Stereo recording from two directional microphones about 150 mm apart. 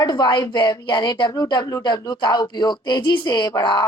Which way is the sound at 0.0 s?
30° left (ahead or behind).